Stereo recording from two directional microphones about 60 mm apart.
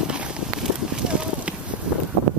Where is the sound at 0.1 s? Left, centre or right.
Centre.